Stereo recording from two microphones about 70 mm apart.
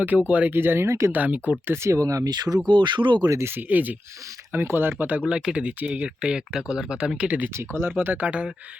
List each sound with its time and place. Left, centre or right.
0.3 s speech: right
0.9 s speech: right
1.1 s speech: right
1.7 s speech: right
2.0 s speech: right
2.3 s speech: right
2.6 s speech: right
3.2 s speech: right
3.5 s speech: right
5.3 s speech: centre
7.5 s speech: right; by 8.5 s centre